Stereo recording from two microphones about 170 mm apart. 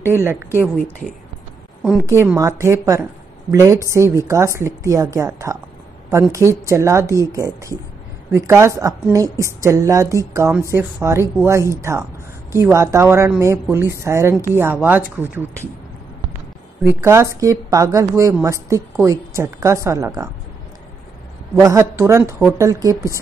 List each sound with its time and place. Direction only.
0.0 s a woman's voice: 15° right (ahead or behind)
2.0 s a woman's voice: 15° right (ahead or behind)
16.8 s a woman's voice: 15° right (ahead or behind)
21.5 s a woman's voice: 15° right (ahead or behind)